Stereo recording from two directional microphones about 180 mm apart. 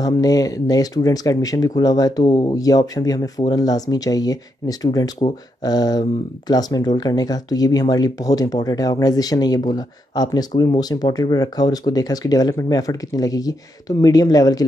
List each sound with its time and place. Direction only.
0.0 s speech: 20° left (ahead or behind)